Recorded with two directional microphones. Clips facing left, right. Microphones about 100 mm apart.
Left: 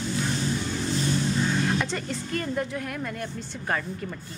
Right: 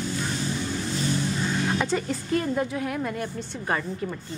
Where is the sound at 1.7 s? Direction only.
5° right (ahead or behind).